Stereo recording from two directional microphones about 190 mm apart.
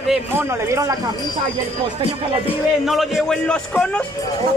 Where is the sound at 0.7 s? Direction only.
15° right (ahead or behind).